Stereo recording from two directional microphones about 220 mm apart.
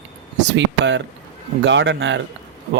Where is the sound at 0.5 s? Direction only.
55° right (ahead or behind).